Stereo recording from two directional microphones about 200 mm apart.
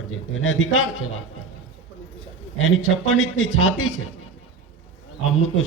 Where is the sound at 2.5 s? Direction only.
85° left.